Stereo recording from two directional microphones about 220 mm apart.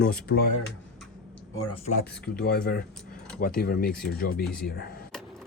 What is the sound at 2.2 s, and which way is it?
Speech, 45° left (ahead or behind).